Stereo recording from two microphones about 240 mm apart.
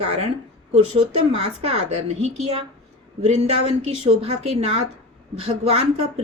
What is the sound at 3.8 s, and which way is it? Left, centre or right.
A woman's voice, right.